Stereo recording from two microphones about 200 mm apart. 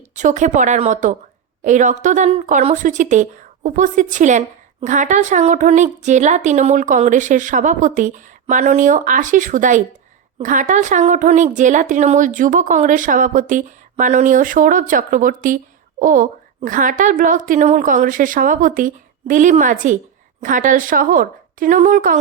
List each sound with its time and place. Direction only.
0.2 s speech: 35° right (ahead or behind)